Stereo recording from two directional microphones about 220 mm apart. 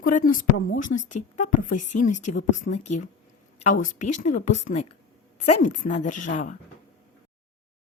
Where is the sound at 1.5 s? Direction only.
35° left (ahead or behind).